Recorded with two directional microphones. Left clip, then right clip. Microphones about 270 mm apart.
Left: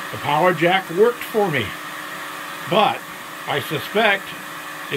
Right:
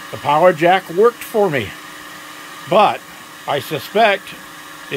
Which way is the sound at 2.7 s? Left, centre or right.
Centre.